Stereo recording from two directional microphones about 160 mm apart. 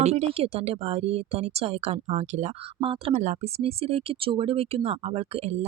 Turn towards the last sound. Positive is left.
turn(degrees=-40)  # may be behind; listen again after turning